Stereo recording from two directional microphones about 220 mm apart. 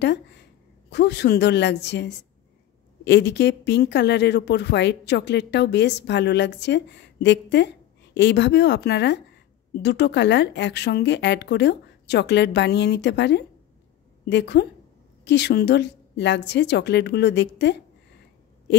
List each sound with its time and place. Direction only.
0.0 s a woman's voice: 50° left (ahead or behind)